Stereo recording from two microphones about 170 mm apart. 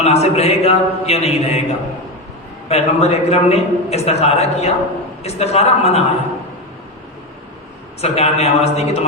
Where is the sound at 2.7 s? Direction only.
40° left (ahead or behind).